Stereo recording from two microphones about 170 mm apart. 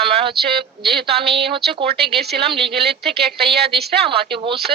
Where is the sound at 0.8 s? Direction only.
70° right (ahead or behind).